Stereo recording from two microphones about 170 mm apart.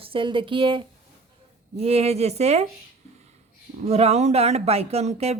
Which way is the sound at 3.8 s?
35° right (ahead or behind).